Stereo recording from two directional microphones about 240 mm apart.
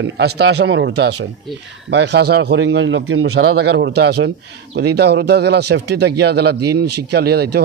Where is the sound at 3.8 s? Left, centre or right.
Right.